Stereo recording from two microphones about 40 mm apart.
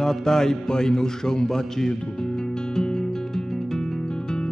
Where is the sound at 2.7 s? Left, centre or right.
Centre.